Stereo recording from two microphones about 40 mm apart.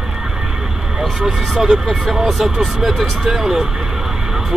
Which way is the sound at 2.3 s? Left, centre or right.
Centre.